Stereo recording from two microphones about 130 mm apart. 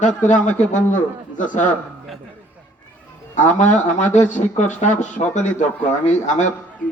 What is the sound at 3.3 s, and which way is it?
Speech, 70° left (ahead or behind).